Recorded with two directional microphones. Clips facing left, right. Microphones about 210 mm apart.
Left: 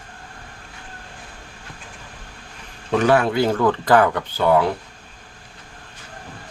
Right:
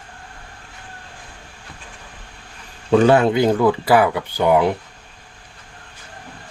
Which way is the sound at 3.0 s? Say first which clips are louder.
Right 2 dB; 25° right (ahead or behind).